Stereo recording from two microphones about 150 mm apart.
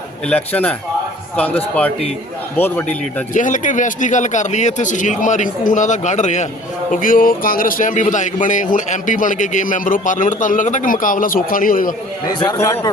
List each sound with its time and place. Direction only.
0.3 s a man's voice: 10° left (ahead or behind)
2.6 s a man's voice: 15° left (ahead or behind)
3.3 s a man's voice: 55° left (ahead or behind)
6.9 s a man's voice: 65° left (ahead or behind)
12.3 s a man's voice: 25° left (ahead or behind)